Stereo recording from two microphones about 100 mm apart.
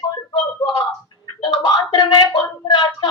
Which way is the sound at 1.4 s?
50° left (ahead or behind).